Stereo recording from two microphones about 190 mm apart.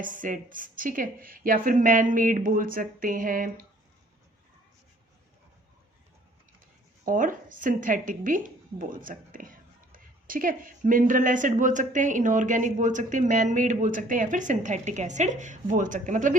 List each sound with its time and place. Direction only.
0.0 s a woman's voice: 45° right (ahead or behind)
7.0 s a woman's voice: 45° right (ahead or behind)